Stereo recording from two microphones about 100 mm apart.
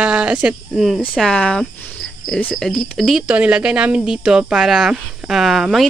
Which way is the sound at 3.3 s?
10° right (ahead or behind).